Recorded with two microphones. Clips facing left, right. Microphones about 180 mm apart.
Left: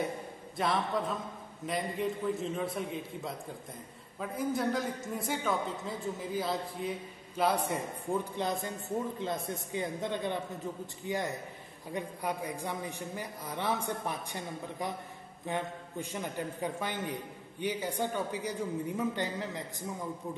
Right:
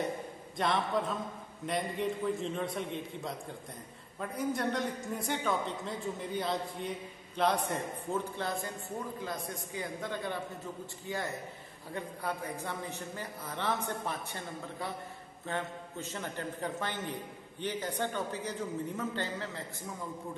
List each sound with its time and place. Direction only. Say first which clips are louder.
0.6 s a man's voice: even; centre (ahead or behind)